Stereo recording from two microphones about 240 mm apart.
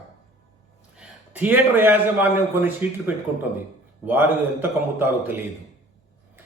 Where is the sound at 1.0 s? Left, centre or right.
Centre.